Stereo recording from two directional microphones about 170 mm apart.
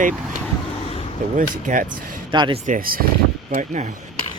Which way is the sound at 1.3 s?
50° right (ahead or behind).